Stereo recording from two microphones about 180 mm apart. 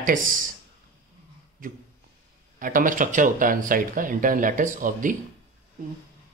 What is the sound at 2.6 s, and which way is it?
Speech, 50° right (ahead or behind).